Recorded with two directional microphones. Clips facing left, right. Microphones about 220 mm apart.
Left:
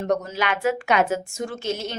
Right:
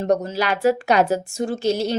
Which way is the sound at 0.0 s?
35° right (ahead or behind).